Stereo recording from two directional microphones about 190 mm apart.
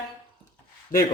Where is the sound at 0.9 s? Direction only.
45° left (ahead or behind).